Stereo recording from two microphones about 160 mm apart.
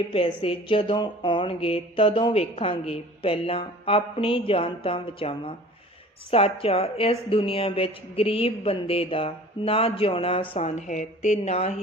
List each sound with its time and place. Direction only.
0.1 s speech: 35° left (ahead or behind)